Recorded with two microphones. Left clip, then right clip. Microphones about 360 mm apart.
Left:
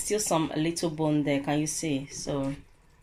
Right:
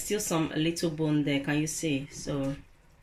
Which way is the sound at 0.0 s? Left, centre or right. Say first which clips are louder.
Left 3 dB; centre.